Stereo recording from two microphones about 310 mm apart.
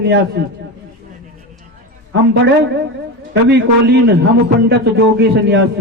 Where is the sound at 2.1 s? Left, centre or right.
Right.